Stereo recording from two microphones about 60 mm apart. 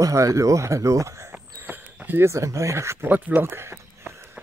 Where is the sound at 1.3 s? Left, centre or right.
Right.